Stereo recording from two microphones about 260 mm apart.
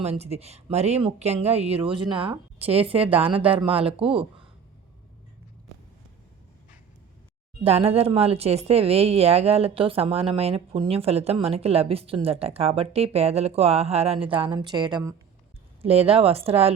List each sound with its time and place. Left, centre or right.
0.0 s speech: right
7.6 s speech: right